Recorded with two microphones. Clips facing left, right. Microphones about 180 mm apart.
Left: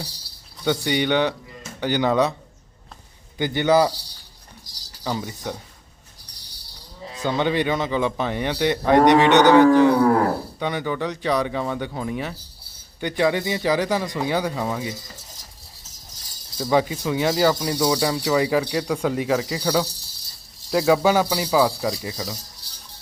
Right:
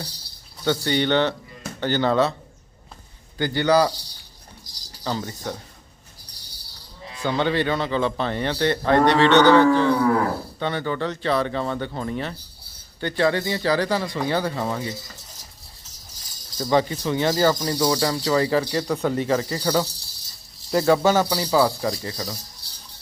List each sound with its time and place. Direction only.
0.6 s speech: 10° left (ahead or behind)
3.3 s a man's voice: 20° left (ahead or behind)
5.0 s speech: 10° left (ahead or behind)
7.2 s speech: 15° left (ahead or behind)
16.6 s speech: 5° left (ahead or behind)